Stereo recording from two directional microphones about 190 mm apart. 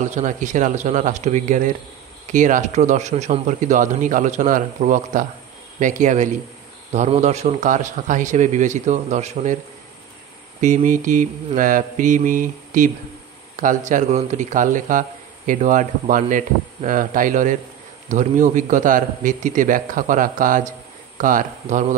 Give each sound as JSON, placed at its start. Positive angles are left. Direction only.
{"t": 0.0, "sound": "speech", "side_deg": -40}
{"t": 10.6, "sound": "speech", "side_deg": -40}